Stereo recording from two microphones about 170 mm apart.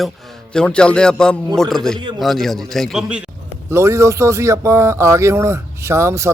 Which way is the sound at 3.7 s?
15° right (ahead or behind).